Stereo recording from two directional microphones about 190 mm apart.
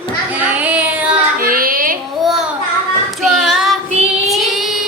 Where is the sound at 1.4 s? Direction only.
50° right (ahead or behind).